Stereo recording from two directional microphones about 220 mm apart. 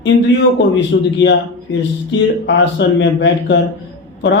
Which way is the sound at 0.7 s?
50° left (ahead or behind).